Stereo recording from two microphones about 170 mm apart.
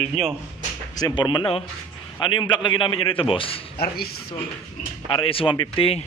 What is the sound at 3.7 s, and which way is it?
Speech, 65° left (ahead or behind).